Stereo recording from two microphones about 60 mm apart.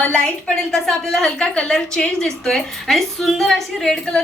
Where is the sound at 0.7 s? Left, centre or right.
Centre.